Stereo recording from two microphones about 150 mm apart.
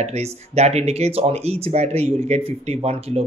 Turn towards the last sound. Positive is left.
turn(degrees=-45)  # may be behind; listen again after turning